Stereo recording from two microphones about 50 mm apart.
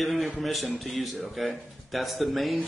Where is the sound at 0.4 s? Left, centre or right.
Centre.